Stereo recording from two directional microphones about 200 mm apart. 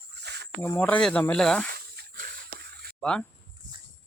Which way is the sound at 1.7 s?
45° right (ahead or behind).